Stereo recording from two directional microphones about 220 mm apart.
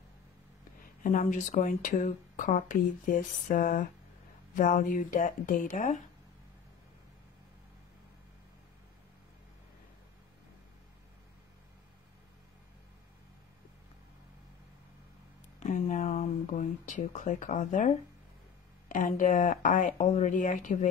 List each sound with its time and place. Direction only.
1.0 s speech: 35° left (ahead or behind)
15.6 s speech: 35° left (ahead or behind)